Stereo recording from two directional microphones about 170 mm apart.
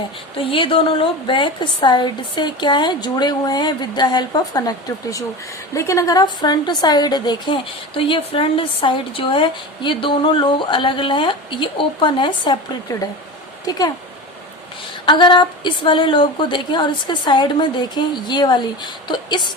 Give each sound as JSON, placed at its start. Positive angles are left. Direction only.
{"t": 0.3, "sound": "a woman's voice", "side_deg": 30}
{"t": 5.7, "sound": "a woman's voice", "side_deg": 20}
{"t": 15.0, "sound": "a woman's voice", "side_deg": 25}